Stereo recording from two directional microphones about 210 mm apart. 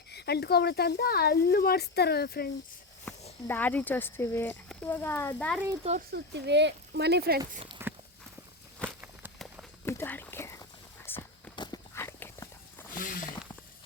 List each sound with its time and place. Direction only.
0.1 s speech: 50° left (ahead or behind)
3.4 s speech: 10° left (ahead or behind)
6.1 s speech: 55° right (ahead or behind)
7.8 s walk: 10° right (ahead or behind)
9.8 s a sound: 10° left (ahead or behind)